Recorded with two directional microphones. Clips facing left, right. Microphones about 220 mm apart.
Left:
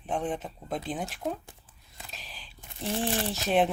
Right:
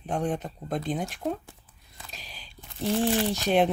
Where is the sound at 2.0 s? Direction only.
Centre (ahead or behind).